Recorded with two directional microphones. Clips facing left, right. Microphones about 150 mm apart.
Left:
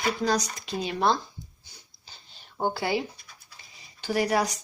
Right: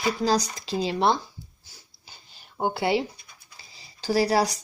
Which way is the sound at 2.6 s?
20° right (ahead or behind).